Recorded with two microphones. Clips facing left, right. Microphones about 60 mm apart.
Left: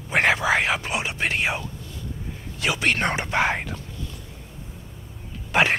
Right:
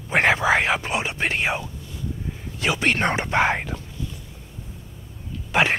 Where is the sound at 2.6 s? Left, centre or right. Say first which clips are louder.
Right 1 dB; right.